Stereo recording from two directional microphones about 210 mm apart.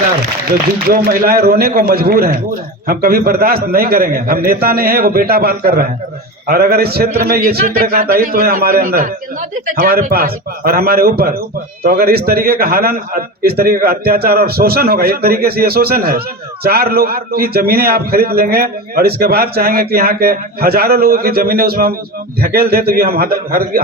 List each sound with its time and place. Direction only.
0.9 s a man's voice: 45° right (ahead or behind)